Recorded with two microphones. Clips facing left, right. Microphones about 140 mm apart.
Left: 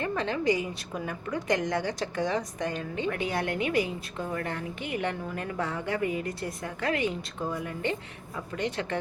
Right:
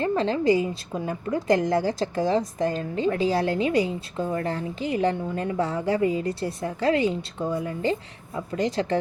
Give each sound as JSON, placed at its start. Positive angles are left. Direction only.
{"t": 0.0, "sound": "a woman's voice", "side_deg": -30}